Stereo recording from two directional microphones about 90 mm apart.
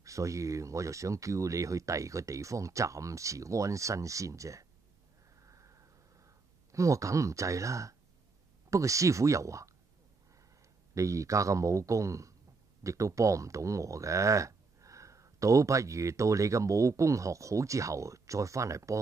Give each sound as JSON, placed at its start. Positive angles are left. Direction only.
{"t": 0.0, "sound": "speech", "side_deg": -35}
{"t": 5.4, "sound": "a sound", "side_deg": -35}
{"t": 8.6, "sound": "speech", "side_deg": -35}
{"t": 11.0, "sound": "speech", "side_deg": -35}